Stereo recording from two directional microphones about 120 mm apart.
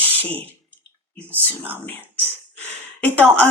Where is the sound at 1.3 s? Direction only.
15° right (ahead or behind).